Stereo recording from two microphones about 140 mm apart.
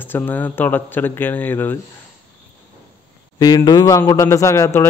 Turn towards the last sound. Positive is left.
turn(degrees=20)  # may be behind; listen again after turning